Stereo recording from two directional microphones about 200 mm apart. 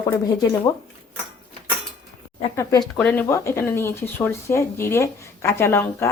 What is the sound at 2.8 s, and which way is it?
Speech, 5° left (ahead or behind).